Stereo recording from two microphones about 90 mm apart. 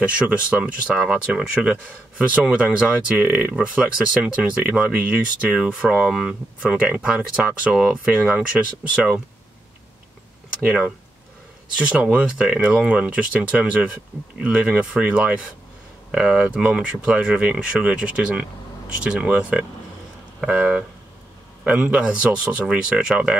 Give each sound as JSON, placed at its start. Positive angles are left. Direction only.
{"t": 0.0, "sound": "speech", "side_deg": -15}
{"t": 10.6, "sound": "speech", "side_deg": -15}